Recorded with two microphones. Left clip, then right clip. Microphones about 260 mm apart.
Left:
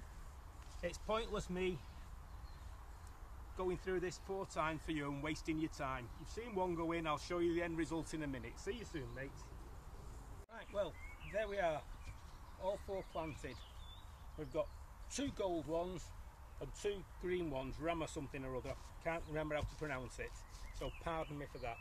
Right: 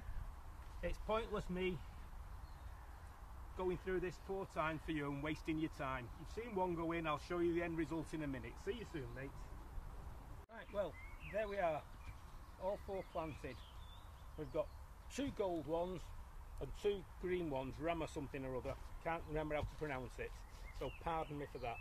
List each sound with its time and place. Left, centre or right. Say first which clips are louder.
0.7 s speech: left 1 dB; centre
3.5 s speech: left 1 dB; centre
10.5 s speech: left 1 dB; centre; by 21.7 s right